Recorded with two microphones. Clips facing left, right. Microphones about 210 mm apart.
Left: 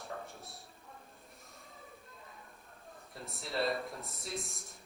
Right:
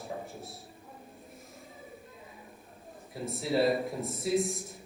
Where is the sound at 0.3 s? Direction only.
Centre (ahead or behind).